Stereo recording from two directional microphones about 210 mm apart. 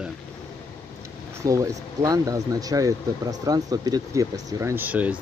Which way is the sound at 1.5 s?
15° right (ahead or behind).